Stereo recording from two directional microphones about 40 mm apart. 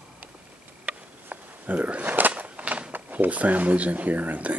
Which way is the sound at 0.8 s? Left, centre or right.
Right.